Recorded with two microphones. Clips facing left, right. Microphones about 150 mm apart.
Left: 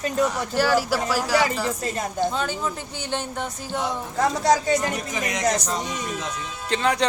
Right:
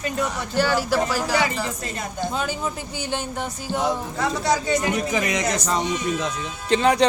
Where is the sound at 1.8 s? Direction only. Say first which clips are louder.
Left 4 dB; 35° left (ahead or behind).